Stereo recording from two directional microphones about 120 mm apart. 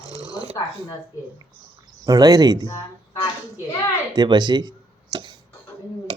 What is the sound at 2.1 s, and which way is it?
Speech, 30° right (ahead or behind).